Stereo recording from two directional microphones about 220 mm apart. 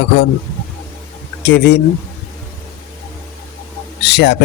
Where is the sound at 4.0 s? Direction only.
50° left (ahead or behind).